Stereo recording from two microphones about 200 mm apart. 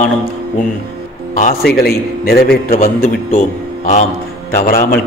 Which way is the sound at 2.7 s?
30° left (ahead or behind).